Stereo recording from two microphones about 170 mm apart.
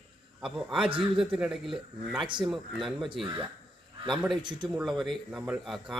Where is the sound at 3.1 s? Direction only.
30° right (ahead or behind).